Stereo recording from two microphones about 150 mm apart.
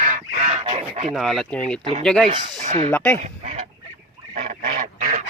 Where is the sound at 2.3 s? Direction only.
30° right (ahead or behind).